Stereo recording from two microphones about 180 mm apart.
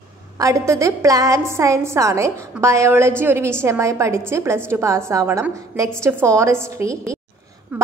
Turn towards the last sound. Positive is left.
turn(degrees=-15)  # may be behind; listen again after turning